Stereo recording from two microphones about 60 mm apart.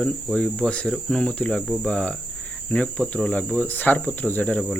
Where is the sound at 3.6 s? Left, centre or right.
Left.